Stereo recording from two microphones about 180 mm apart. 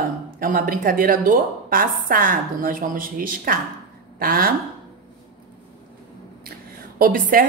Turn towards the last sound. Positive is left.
turn(degrees=-50)  # may be behind; listen again after turning